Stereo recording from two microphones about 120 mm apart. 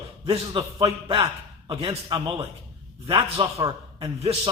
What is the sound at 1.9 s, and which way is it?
A man's voice, 40° right (ahead or behind).